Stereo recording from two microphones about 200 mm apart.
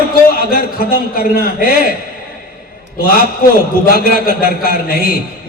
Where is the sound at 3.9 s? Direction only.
45° left (ahead or behind).